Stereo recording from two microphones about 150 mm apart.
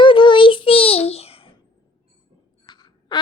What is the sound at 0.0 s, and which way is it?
Child singing, 35° left (ahead or behind).